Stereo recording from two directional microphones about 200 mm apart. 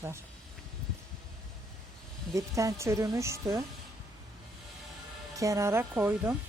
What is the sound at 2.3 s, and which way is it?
Speech, 15° right (ahead or behind).